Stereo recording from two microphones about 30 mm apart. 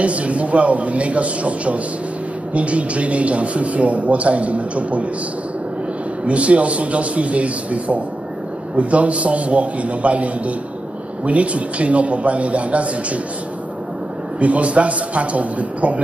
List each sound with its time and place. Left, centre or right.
0.0 s a man's voice: right
6.2 s a man's voice: right
14.4 s a man's voice: right